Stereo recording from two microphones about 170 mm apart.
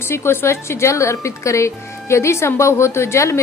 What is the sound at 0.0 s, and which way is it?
A woman's voice, 15° left (ahead or behind).